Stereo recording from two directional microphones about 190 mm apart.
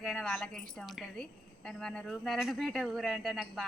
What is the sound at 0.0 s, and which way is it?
Speech, 5° left (ahead or behind).